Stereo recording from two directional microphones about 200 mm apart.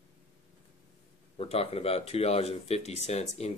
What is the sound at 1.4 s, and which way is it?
Speech, 30° left (ahead or behind).